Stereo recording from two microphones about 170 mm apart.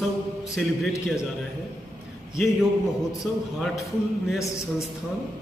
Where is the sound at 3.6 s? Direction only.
Centre (ahead or behind).